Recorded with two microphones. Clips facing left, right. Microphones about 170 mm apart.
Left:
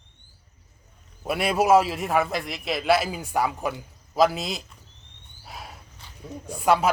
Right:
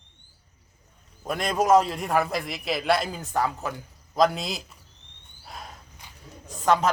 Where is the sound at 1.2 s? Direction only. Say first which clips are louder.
Left 2 dB; 10° left (ahead or behind).